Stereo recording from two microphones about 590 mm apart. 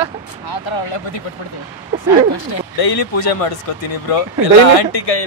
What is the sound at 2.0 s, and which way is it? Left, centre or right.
Speech, left.